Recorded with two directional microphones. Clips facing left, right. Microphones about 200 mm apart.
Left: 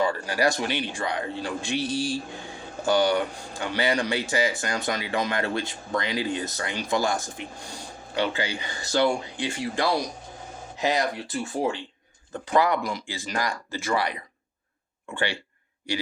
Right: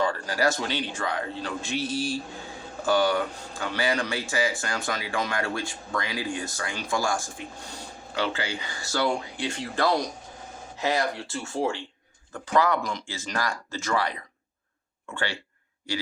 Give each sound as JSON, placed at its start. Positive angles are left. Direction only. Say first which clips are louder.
{"t": 0.0, "sound": "speech", "louder": "left 1 dB", "side_deg": 15}